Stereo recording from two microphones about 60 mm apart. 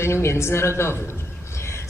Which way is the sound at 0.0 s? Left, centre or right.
Left.